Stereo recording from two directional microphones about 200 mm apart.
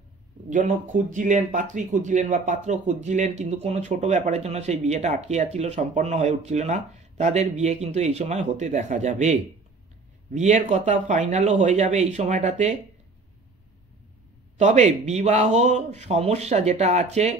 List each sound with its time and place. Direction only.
0.5 s speech: 40° right (ahead or behind)
14.6 s speech: 35° right (ahead or behind)